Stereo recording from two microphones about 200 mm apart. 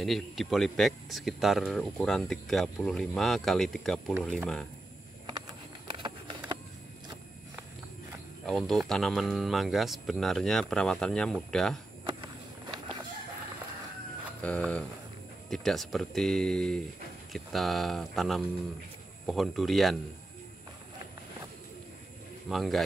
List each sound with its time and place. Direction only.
0.0 s speech: centre (ahead or behind)
5.2 s a sound: 20° right (ahead or behind)
8.5 s speech: centre (ahead or behind)
12.0 s walk: 20° right (ahead or behind)
14.4 s speech: 5° left (ahead or behind)
22.5 s speech: centre (ahead or behind)